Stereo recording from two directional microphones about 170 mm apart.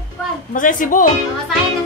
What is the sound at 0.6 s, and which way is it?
Music, 50° left (ahead or behind).